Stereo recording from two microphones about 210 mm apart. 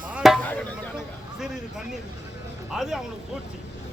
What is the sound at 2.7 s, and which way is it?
Speech, centre (ahead or behind).